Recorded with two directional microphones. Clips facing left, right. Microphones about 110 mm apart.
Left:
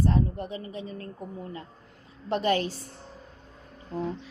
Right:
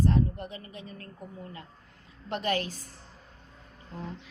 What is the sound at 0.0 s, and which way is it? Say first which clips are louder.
A woman's voice: left 1 dB; 40° left (ahead or behind).